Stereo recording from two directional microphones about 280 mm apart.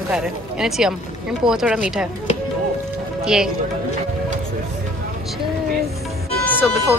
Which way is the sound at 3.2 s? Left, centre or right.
Centre.